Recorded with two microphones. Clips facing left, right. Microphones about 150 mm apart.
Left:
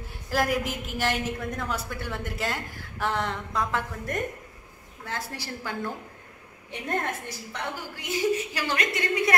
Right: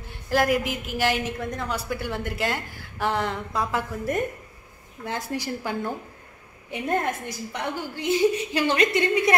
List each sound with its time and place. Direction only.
0.1 s a woman's voice: centre (ahead or behind)
5.0 s a woman's voice: 15° right (ahead or behind)
7.7 s a woman's voice: 25° right (ahead or behind)